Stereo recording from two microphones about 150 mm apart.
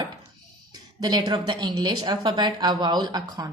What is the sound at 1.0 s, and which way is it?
A woman's voice, 25° right (ahead or behind).